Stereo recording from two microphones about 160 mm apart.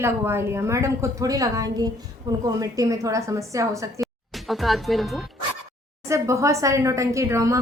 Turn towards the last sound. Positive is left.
turn(degrees=-20)  # may be behind; listen again after turning